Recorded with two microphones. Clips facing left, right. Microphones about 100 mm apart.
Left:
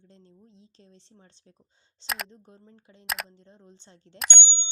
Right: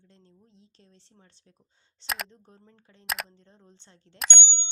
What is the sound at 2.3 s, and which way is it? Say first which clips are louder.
Speech: left 3 dB; 20° left (ahead or behind).